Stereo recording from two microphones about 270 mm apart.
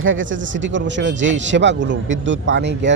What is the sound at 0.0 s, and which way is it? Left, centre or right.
Speech, right.